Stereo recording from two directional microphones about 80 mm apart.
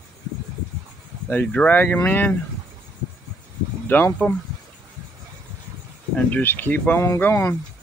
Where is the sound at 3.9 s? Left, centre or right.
Left.